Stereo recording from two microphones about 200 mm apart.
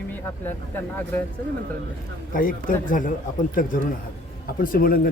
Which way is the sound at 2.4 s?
45° left (ahead or behind).